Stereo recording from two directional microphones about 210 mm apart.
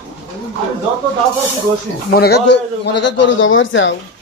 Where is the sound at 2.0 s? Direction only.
50° left (ahead or behind).